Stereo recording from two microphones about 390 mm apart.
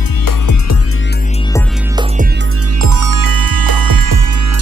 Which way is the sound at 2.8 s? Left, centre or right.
Right.